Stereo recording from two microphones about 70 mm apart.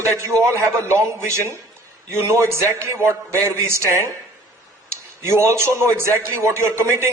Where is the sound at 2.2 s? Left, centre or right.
Right.